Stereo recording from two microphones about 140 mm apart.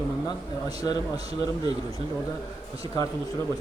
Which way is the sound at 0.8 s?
30° left (ahead or behind).